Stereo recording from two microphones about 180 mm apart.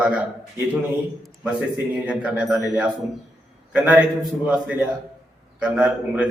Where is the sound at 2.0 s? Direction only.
5° right (ahead or behind).